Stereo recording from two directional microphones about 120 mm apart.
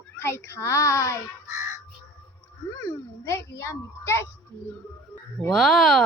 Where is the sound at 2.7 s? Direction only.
25° left (ahead or behind).